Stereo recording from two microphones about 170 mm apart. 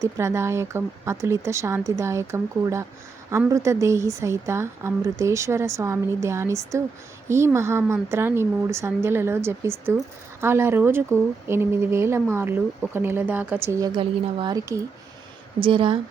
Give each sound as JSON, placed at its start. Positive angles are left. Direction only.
{"t": 0.0, "sound": "a woman's voice", "side_deg": -15}
{"t": 15.6, "sound": "speech", "side_deg": -30}